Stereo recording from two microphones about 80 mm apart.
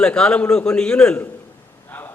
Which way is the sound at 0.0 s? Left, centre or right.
Centre.